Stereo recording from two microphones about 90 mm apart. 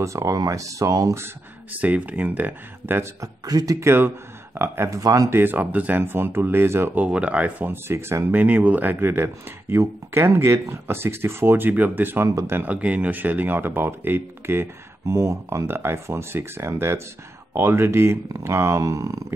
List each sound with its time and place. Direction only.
0.0 s speech: 35° right (ahead or behind)
1.2 s speech: 20° right (ahead or behind)
3.0 s speech: 40° right (ahead or behind)
5.3 s speech: 20° right (ahead or behind)
7.0 s speech: 15° right (ahead or behind); by 19.2 s 35° right (ahead or behind)